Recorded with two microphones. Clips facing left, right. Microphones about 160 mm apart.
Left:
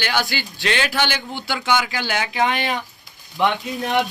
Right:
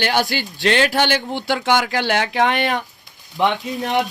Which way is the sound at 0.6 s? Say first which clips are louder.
Right 5 dB; 55° right (ahead or behind).